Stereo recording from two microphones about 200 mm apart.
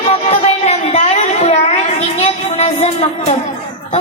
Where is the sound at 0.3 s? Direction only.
30° left (ahead or behind).